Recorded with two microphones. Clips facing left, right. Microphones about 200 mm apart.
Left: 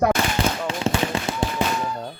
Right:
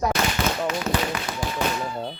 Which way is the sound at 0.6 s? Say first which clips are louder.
Left 1 dB; 30° left (ahead or behind).